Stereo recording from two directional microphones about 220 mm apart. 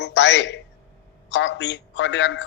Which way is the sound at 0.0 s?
55° left (ahead or behind).